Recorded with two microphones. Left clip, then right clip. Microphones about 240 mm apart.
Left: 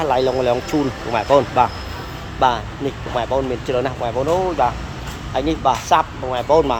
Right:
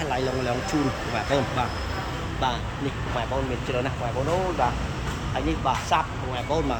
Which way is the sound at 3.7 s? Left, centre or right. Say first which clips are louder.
Left 8 dB; left.